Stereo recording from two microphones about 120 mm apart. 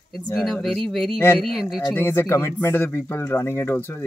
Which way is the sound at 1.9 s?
15° left (ahead or behind).